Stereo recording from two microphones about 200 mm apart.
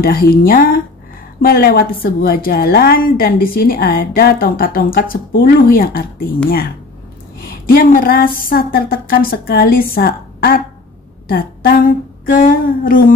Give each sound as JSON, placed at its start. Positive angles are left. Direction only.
{"t": 0.0, "sound": "a woman's voice", "side_deg": 50}
{"t": 7.4, "sound": "a woman's voice", "side_deg": 50}